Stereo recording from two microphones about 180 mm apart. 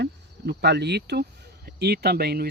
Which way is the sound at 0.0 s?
70° right (ahead or behind).